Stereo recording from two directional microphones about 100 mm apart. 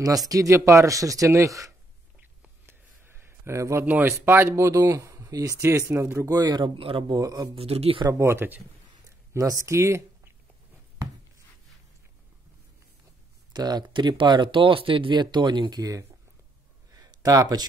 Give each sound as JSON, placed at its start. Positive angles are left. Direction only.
{"t": 0.3, "sound": "speech", "side_deg": -35}
{"t": 2.6, "sound": "a sound", "side_deg": -25}
{"t": 3.8, "sound": "speech", "side_deg": -20}
{"t": 6.6, "sound": "speech", "side_deg": -60}
{"t": 7.1, "sound": "speech", "side_deg": -35}
{"t": 7.5, "sound": "speech", "side_deg": -90}
{"t": 8.1, "sound": "speech", "side_deg": -25}
{"t": 9.3, "sound": "speech", "side_deg": -30}
{"t": 13.5, "sound": "speech", "side_deg": -45}
{"t": 16.9, "sound": "a sound", "side_deg": -40}